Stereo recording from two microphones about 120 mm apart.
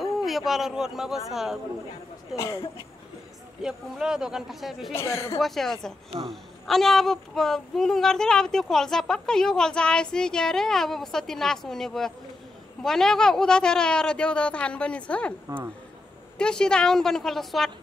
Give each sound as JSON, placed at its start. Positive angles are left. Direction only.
{"t": 0.0, "sound": "a man's voice", "side_deg": 0}
{"t": 2.3, "sound": "a woman's voice", "side_deg": 30}
{"t": 3.6, "sound": "a woman's voice", "side_deg": -5}
{"t": 4.9, "sound": "a woman's voice", "side_deg": 25}
{"t": 5.4, "sound": "a woman's voice", "side_deg": 0}
{"t": 16.3, "sound": "a woman's voice", "side_deg": 5}